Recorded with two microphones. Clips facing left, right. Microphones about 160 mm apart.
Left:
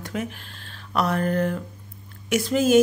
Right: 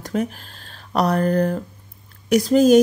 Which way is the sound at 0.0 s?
40° right (ahead or behind).